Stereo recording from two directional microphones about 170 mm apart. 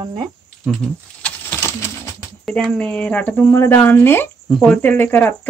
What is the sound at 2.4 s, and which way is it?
Speech, 5° left (ahead or behind).